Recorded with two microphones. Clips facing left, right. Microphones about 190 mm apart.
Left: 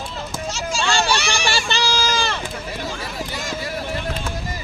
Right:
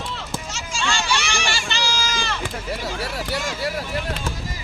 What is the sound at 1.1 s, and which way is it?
Run, 35° left (ahead or behind).